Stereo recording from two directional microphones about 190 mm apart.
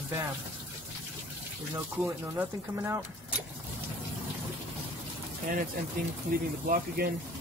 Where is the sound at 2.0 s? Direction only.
Centre (ahead or behind).